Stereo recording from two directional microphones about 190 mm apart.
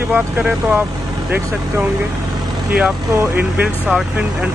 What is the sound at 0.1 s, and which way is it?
Speech, 5° right (ahead or behind).